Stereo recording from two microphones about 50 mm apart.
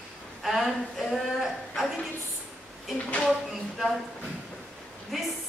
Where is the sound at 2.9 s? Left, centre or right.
Left.